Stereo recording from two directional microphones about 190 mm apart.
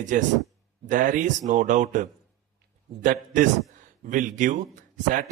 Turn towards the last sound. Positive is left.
turn(degrees=-45)  # may be behind; listen again after turning